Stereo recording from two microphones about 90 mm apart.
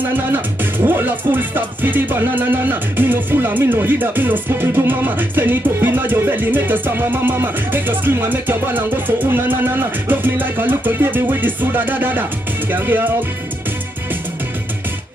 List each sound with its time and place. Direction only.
0.3 s music: 20° right (ahead or behind)